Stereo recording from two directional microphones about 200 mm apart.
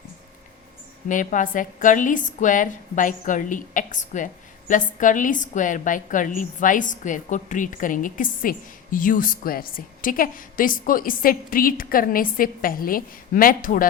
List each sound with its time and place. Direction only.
1.0 s a woman's voice: 40° left (ahead or behind)